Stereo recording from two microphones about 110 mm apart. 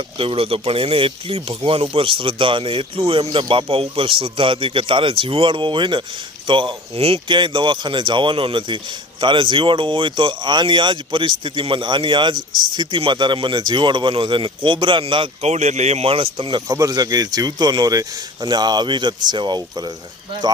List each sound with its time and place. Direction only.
0.2 s speech: 55° right (ahead or behind)
3.2 s speech: 45° right (ahead or behind); by 7.2 s 65° right (ahead or behind)
7.3 s speech: 45° right (ahead or behind)
15.4 s speech: 90° right; by 16.6 s 50° right (ahead or behind)
16.6 s speech: 30° right (ahead or behind)